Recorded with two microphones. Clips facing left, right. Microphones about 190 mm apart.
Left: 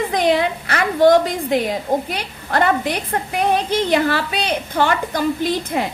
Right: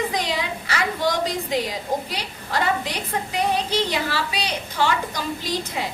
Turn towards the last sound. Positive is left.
turn(degrees=55)  # may be behind; listen again after turning